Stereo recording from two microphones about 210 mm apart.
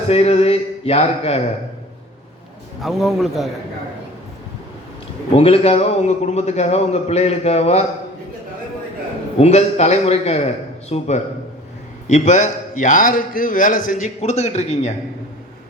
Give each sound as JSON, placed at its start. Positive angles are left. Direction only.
{"t": 0.1, "sound": "a sound", "side_deg": 30}
{"t": 2.8, "sound": "a man's voice", "side_deg": 0}
{"t": 5.3, "sound": "a man's voice", "side_deg": 30}
{"t": 9.4, "sound": "a man's voice", "side_deg": 30}